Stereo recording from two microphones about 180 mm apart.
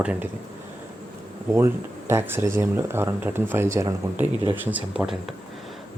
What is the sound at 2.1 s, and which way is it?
Speech, 15° right (ahead or behind).